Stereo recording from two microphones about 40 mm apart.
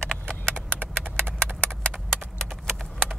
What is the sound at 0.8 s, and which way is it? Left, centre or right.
Clip-clop, right.